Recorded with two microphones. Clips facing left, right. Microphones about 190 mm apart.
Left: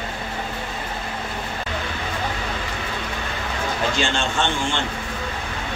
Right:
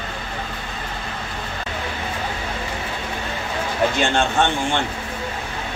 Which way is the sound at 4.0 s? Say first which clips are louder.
Right 4 dB; 55° right (ahead or behind).